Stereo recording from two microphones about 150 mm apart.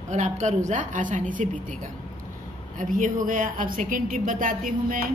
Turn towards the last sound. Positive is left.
turn(degrees=-60)  # may be behind; listen again after turning